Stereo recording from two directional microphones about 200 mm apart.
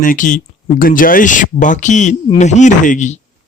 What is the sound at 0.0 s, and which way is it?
Speech, 40° left (ahead or behind).